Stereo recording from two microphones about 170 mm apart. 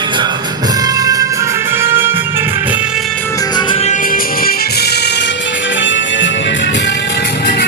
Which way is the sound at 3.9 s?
55° left (ahead or behind).